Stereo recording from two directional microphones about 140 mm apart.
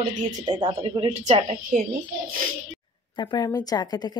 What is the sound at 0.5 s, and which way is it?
Speech, 30° right (ahead or behind).